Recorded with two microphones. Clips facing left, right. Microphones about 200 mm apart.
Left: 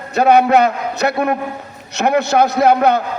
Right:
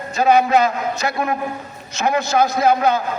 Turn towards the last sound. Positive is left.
turn(degrees=65)  # may be behind; listen again after turning